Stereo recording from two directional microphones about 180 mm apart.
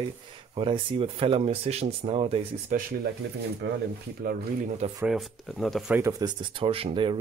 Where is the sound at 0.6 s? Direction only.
30° right (ahead or behind).